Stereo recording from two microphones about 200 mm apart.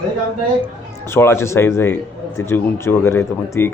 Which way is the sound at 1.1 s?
10° left (ahead or behind).